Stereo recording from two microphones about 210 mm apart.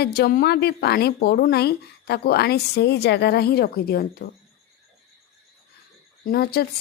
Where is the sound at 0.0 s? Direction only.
50° left (ahead or behind).